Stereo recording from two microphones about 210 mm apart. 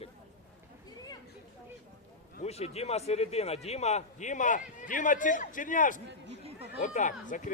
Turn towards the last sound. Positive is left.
turn(degrees=35)  # may be behind; listen again after turning